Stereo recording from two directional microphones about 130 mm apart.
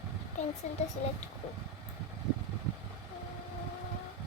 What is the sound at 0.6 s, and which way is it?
Speech, 60° left (ahead or behind).